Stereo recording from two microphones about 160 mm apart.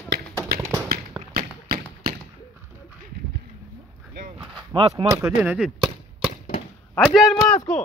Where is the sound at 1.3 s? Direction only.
70° right (ahead or behind).